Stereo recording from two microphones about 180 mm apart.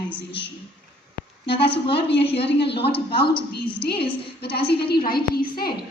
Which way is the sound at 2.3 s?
30° left (ahead or behind).